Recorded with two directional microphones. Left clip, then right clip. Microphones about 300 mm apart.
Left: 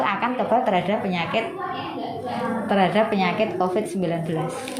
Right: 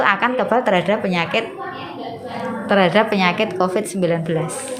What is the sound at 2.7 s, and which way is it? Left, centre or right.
A woman's voice, right.